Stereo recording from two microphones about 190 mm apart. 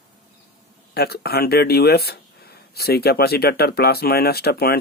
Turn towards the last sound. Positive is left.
turn(degrees=55)  # may be behind; listen again after turning